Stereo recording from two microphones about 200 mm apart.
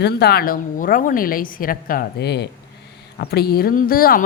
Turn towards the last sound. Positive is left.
turn(degrees=45)  # may be behind; listen again after turning